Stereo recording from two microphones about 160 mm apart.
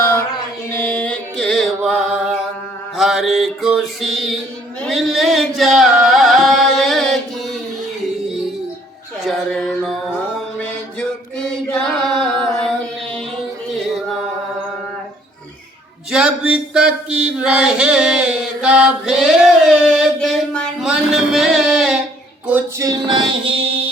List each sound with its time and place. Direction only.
0.7 s mantra: 10° left (ahead or behind)
3.0 s mantra: centre (ahead or behind)
4.8 s music: centre (ahead or behind)
9.2 s music: centre (ahead or behind)
11.3 s a sound: 5° left (ahead or behind)
13.7 s music: centre (ahead or behind)
16.1 s chant: 5° right (ahead or behind)
20.1 s a sound: 5° left (ahead or behind)
22.4 s music: 10° right (ahead or behind)
22.9 s music: 30° right (ahead or behind)